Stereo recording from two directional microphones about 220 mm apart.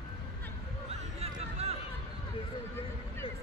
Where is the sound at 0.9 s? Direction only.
30° right (ahead or behind).